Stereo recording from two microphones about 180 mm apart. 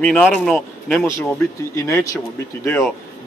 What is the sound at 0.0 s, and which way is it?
Speech, centre (ahead or behind).